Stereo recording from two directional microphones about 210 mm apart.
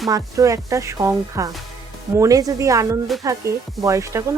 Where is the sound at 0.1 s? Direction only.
15° right (ahead or behind).